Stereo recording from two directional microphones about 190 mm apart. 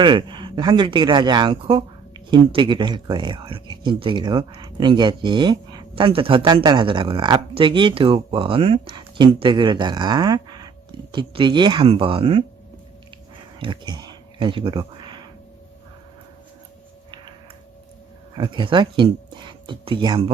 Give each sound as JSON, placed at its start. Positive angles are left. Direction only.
{"t": 0.0, "sound": "speech", "side_deg": -25}
{"t": 13.6, "sound": "a sound", "side_deg": -25}
{"t": 18.3, "sound": "speech", "side_deg": -25}